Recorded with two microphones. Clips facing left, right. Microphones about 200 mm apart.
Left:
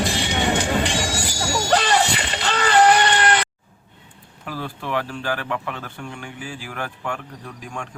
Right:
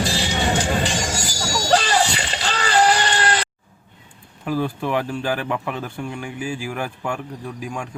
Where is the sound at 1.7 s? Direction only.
55° left (ahead or behind).